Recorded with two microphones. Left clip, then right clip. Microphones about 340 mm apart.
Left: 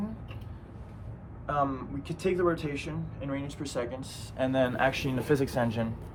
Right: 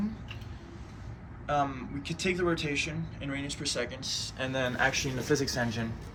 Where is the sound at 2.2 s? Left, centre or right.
Centre.